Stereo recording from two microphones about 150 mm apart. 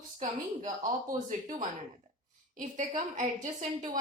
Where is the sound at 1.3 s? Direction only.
60° right (ahead or behind).